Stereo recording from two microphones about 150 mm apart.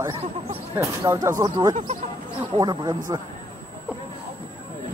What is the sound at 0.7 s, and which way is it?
Speech, 20° right (ahead or behind).